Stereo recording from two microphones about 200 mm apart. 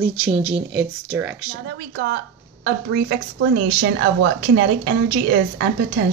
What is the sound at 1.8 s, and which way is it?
A woman's voice, 50° right (ahead or behind).